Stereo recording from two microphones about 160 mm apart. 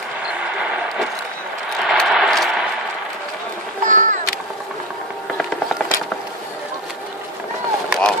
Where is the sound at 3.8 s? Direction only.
50° right (ahead or behind).